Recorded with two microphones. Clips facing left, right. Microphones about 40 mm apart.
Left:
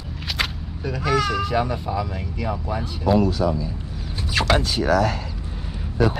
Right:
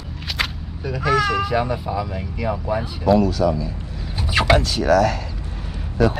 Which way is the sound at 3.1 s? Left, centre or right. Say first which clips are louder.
Right 2 dB; left.